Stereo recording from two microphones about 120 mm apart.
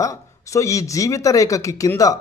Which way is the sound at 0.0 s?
25° left (ahead or behind).